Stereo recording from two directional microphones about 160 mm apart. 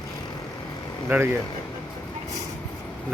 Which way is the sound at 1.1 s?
10° right (ahead or behind).